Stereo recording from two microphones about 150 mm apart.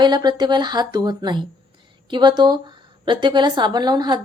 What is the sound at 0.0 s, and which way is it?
A woman's voice, 30° right (ahead or behind).